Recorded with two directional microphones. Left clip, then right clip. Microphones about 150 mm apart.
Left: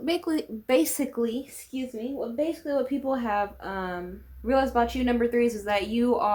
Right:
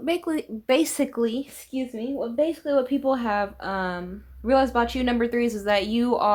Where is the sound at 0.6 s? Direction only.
35° right (ahead or behind).